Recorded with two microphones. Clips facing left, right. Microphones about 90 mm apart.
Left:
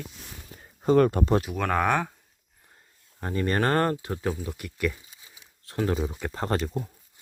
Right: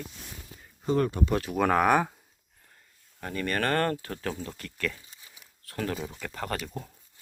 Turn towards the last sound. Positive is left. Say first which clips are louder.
# left 6 dB
turn(degrees=5)  # may be behind; listen again after turning